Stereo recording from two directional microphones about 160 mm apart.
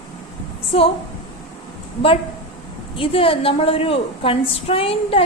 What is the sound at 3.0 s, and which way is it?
A woman's voice, 35° left (ahead or behind).